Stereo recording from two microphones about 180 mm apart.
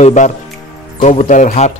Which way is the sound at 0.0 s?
40° left (ahead or behind).